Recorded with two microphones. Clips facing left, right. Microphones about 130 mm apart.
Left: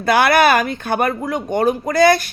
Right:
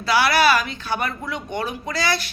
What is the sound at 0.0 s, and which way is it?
Speech, 50° left (ahead or behind).